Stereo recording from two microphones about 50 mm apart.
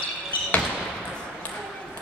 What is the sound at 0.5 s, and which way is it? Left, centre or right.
Basketball bounce, left.